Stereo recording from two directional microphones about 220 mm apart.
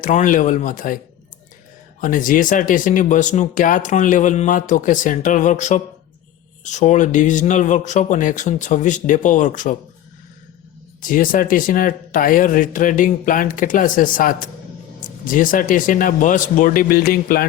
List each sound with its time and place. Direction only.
0.0 s speech: 35° left (ahead or behind)
2.0 s speech: 35° left (ahead or behind)
11.0 s speech: 40° left (ahead or behind)